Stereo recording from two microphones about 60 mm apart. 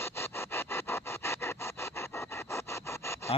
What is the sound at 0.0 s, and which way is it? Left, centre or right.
Sawing, left.